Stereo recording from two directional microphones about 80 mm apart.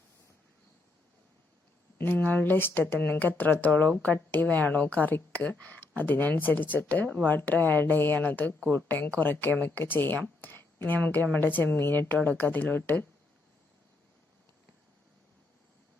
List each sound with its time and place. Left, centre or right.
2.0 s a woman's voice: left